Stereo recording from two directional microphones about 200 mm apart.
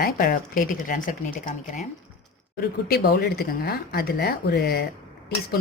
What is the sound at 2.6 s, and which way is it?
Speech, 50° left (ahead or behind).